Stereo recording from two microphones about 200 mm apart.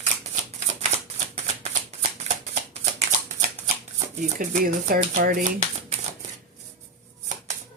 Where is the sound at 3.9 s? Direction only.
40° right (ahead or behind).